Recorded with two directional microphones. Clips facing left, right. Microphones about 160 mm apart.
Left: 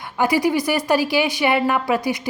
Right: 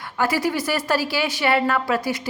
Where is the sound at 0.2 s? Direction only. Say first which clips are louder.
Left 4 dB; 15° left (ahead or behind).